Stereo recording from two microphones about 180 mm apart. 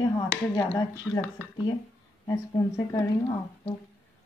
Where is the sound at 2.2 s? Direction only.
20° left (ahead or behind).